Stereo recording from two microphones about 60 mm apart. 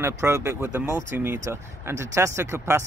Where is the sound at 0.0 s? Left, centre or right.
Right.